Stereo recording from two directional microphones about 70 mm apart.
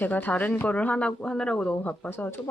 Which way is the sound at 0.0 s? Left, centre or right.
Left.